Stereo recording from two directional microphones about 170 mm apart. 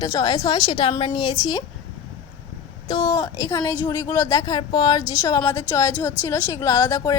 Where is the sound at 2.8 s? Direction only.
25° left (ahead or behind).